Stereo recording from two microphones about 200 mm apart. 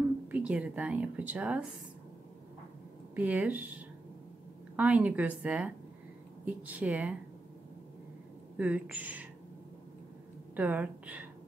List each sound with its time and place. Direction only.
0.3 s speech: 5° right (ahead or behind)
3.2 s speech: 10° right (ahead or behind)
8.5 s speech: 5° right (ahead or behind)
10.5 s a woman's voice: 10° right (ahead or behind)